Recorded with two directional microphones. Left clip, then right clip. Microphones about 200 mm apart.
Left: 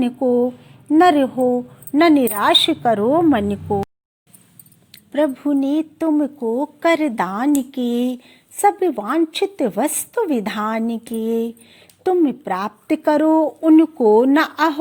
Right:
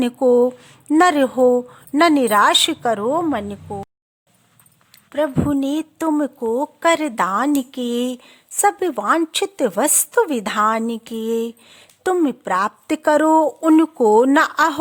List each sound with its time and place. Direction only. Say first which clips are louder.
0.0 s speech: right 3 dB; 35° right (ahead or behind); by 3.8 s centre (ahead or behind)
5.5 s speech: left 2 dB; 25° right (ahead or behind)